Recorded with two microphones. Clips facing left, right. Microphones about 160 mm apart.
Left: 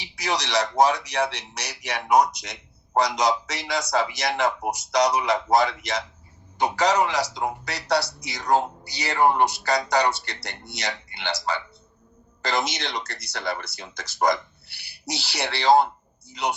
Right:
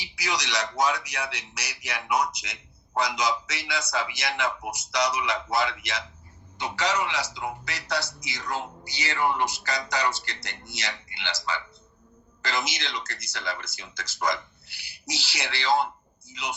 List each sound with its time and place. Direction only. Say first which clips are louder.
0.2 s a man's voice: left 5 dB; 35° left (ahead or behind)
12.4 s a man's voice: left 5 dB; 35° left (ahead or behind)